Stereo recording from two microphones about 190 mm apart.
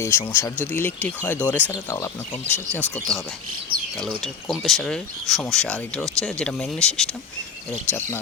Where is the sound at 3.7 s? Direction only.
50° right (ahead or behind).